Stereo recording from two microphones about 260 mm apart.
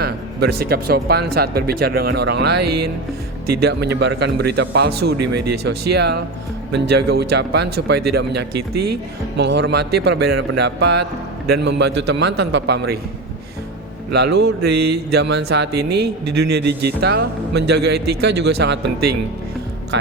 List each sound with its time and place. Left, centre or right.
0.0 s speech: right
2.6 s speech: right
3.6 s speech: right
8.5 s speech: right
9.4 s speech: right
14.1 s speech: right
14.7 s speech: right
14.9 s speech: right
17.9 s speech: right
18.6 s speech: right